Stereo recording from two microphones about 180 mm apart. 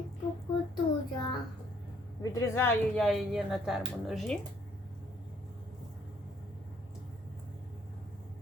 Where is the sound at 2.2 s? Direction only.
15° left (ahead or behind).